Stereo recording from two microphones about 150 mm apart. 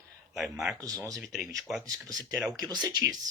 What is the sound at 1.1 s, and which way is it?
Speech, centre (ahead or behind).